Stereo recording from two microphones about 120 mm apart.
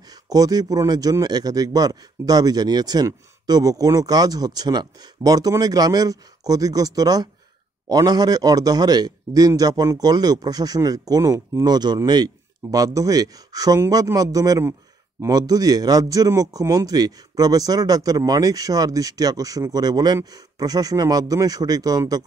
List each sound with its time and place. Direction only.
0.1 s a man's voice: 30° right (ahead or behind)